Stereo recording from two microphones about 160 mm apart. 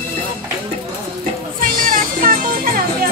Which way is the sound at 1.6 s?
60° right (ahead or behind).